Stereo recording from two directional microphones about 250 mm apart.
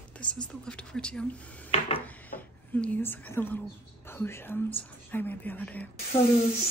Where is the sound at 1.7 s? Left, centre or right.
Left.